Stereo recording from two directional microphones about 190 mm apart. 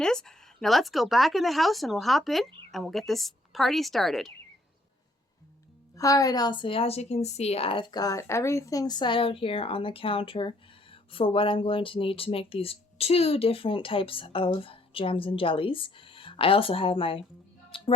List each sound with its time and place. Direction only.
0.0 s speech: 5° left (ahead or behind)
6.0 s speech: 15° left (ahead or behind)
17.7 s a sound: 30° left (ahead or behind)